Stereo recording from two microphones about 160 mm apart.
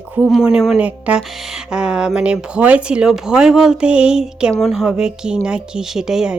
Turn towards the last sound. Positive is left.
turn(degrees=-5)  # may be behind; listen again after turning